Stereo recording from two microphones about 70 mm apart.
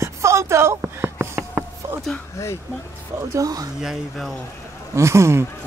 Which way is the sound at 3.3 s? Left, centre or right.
Right.